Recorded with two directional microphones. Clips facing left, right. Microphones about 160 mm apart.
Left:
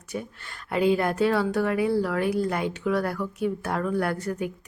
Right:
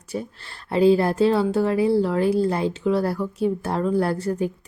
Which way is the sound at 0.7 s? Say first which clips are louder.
Right 5 dB; 30° right (ahead or behind).